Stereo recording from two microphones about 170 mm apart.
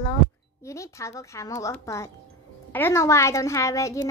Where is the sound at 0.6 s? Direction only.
15° left (ahead or behind).